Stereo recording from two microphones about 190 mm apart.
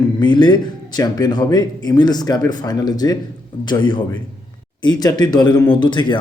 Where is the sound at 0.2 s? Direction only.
25° left (ahead or behind).